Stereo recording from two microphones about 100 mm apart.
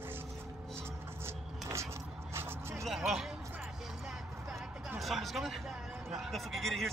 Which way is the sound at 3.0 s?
5° right (ahead or behind).